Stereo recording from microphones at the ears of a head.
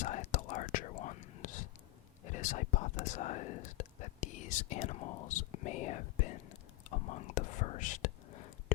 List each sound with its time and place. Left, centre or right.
0.0 s whispering: left
2.2 s speech: left